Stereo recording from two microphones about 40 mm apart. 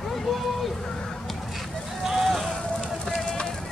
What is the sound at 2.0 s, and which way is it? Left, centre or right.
Vehicle, centre.